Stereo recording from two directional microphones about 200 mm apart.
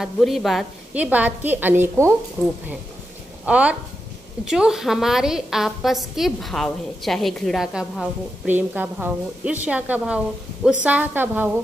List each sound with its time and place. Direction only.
0.0 s a woman's voice: centre (ahead or behind)